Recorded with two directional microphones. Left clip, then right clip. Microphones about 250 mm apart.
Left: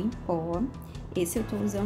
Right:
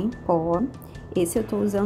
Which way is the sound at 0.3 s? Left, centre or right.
Centre.